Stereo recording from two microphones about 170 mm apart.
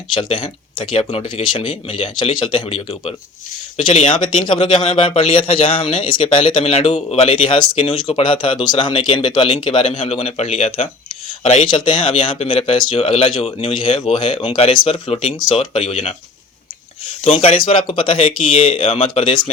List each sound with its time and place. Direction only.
0.1 s speech: 30° left (ahead or behind)
4.4 s speech: 30° left (ahead or behind)
17.3 s speech: 35° left (ahead or behind)